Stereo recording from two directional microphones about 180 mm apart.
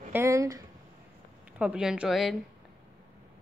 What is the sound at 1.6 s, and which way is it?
Speech, 5° right (ahead or behind).